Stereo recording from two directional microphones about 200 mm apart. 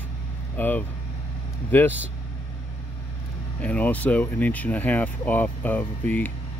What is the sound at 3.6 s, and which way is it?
Speech, 5° left (ahead or behind).